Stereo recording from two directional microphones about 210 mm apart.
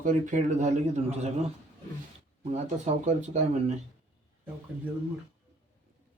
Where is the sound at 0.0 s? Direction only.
40° right (ahead or behind).